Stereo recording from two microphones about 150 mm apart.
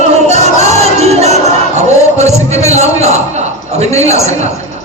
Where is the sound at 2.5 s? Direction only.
45° right (ahead or behind).